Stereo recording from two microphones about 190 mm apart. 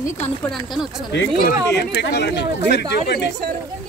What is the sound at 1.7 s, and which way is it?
Speech, 60° left (ahead or behind).